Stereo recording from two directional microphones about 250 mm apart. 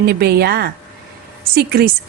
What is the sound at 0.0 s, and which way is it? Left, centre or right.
A woman's voice, right.